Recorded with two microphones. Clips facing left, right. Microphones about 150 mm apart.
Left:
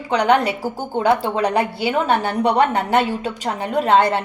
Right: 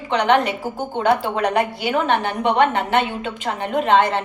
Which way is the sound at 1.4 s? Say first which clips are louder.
Left 1 dB; 30° left (ahead or behind).